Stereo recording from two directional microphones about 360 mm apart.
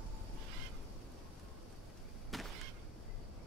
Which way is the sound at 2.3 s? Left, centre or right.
Centre.